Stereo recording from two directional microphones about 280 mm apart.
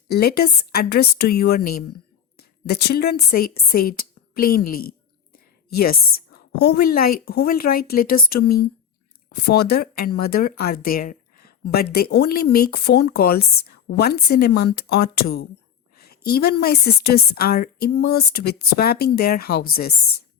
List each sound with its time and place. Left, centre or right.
0.1 s speech: left
1.9 s a sound: left
2.8 s a woman's voice: left